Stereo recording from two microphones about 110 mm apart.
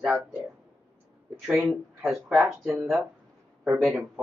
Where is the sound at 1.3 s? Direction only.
20° right (ahead or behind).